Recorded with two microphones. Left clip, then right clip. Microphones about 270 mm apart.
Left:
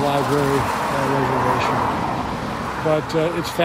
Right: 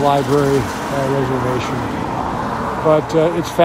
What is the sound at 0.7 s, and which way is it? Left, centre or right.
Speech, centre.